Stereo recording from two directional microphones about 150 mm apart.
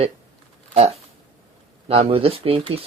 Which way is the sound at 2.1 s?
40° right (ahead or behind).